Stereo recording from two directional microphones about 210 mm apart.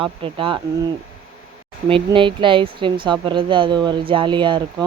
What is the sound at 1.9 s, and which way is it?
Speech, 25° right (ahead or behind).